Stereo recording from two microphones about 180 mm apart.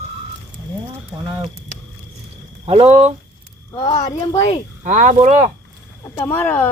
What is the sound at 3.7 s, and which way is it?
Speech, 30° left (ahead or behind).